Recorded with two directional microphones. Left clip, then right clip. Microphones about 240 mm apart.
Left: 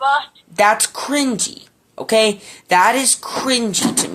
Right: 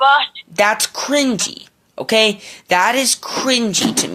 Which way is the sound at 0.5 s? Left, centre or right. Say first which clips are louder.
Left 1 dB; right.